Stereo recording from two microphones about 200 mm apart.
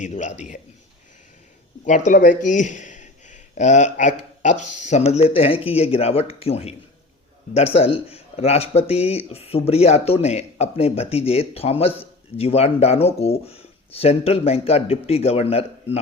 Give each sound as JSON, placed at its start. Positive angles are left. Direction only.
{"t": 0.0, "sound": "speech", "side_deg": 35}
{"t": 1.8, "sound": "speech", "side_deg": 40}